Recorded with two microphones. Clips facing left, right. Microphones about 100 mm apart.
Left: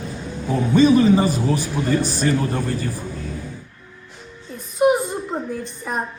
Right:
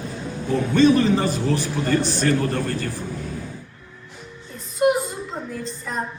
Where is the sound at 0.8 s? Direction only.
10° left (ahead or behind).